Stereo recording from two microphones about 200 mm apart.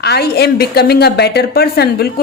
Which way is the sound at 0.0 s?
55° left (ahead or behind).